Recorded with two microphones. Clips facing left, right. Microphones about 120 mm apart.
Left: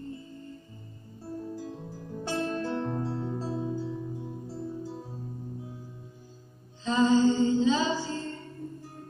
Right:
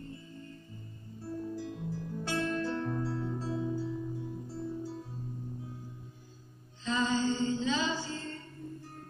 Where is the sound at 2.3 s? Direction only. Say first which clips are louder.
Left 2 dB; 30° left (ahead or behind).